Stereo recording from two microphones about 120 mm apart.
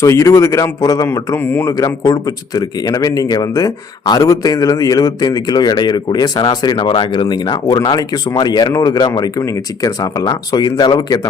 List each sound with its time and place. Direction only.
0.0 s speech: 25° left (ahead or behind)
1.7 s speech: 30° left (ahead or behind)